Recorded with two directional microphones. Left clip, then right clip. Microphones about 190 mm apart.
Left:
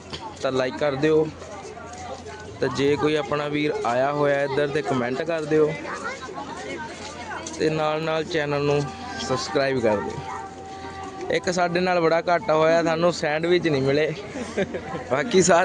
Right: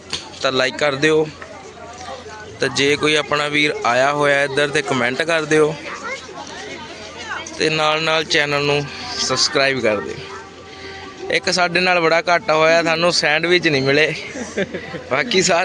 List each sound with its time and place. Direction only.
0.1 s speech: centre (ahead or behind)
2.6 s speech: 5° left (ahead or behind)
7.6 s speech: 5° left (ahead or behind)
11.3 s speech: 10° left (ahead or behind)
15.3 s a man's voice: 25° left (ahead or behind)